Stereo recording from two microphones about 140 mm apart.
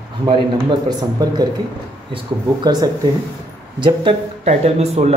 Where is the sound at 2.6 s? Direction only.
30° right (ahead or behind).